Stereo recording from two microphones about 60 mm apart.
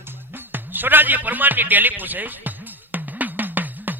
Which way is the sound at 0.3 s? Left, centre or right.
Right.